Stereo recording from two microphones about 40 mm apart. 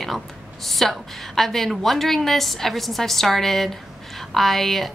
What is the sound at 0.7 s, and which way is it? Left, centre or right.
A woman's voice, centre.